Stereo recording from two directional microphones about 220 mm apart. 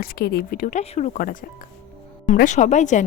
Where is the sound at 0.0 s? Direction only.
45° left (ahead or behind).